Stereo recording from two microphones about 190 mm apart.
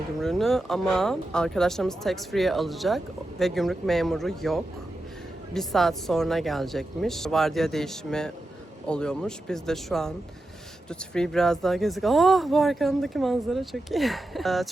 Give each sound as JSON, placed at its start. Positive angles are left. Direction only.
{"t": 0.2, "sound": "speech", "side_deg": 0}